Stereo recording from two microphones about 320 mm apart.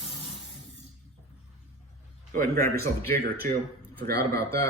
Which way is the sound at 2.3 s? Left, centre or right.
Right.